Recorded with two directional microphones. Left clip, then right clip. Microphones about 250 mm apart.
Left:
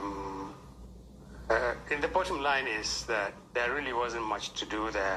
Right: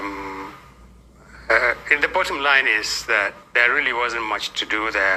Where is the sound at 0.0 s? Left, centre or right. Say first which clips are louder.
Right 8 dB; right.